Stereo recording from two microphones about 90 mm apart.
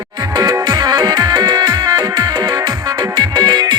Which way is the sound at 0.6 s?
50° right (ahead or behind).